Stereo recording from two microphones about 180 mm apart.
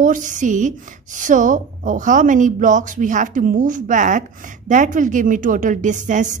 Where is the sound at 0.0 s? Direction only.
45° right (ahead or behind).